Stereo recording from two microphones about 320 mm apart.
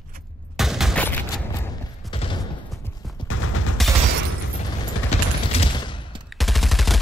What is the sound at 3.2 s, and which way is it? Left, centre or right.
Fusillade, left.